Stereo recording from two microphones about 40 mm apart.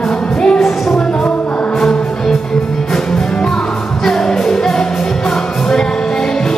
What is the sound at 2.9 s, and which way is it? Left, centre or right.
Music, centre.